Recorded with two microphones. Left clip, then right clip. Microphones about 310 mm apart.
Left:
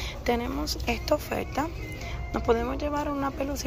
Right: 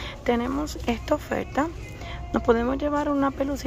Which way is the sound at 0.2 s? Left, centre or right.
Centre.